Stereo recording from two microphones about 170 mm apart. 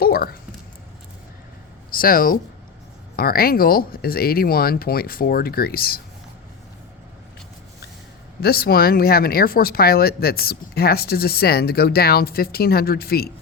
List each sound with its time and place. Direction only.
0.0 s speech: 60° left (ahead or behind)
1.9 s speech: 60° left (ahead or behind)
8.4 s speech: 65° left (ahead or behind)